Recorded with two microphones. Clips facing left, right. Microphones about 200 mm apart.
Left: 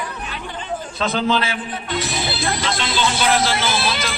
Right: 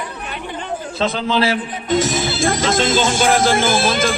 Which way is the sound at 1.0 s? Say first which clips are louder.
Right 2 dB; 35° right (ahead or behind).